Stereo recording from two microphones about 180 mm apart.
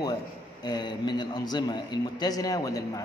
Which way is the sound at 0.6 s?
25° left (ahead or behind).